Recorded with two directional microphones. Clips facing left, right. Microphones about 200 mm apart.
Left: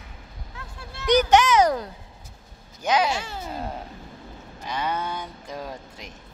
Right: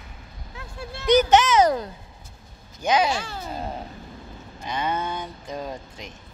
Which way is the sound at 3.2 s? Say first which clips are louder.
Even; 20° left (ahead or behind).